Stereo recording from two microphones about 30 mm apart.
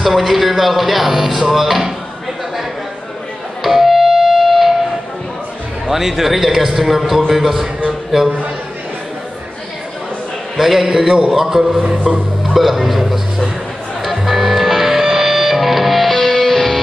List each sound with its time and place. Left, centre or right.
0.0 s speech: centre
3.6 s music: centre
5.9 s a man's voice: centre
10.6 s a man's voice: centre
14.0 s music: centre